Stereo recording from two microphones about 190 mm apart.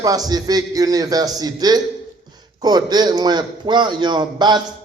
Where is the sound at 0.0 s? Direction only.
20° right (ahead or behind).